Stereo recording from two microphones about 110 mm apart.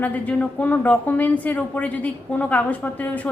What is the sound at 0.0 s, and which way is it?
A woman's voice, 15° left (ahead or behind).